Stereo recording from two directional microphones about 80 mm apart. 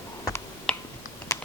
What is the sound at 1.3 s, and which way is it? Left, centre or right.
Typing, left.